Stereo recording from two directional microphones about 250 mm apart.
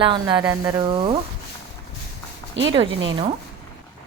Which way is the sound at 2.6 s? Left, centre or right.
Right.